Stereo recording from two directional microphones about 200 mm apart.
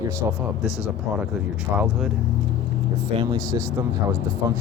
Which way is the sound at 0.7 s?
15° left (ahead or behind).